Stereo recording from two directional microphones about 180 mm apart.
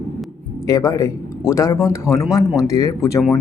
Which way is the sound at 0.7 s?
20° left (ahead or behind).